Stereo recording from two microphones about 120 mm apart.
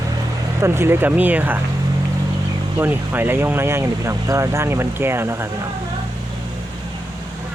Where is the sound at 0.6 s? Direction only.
20° right (ahead or behind).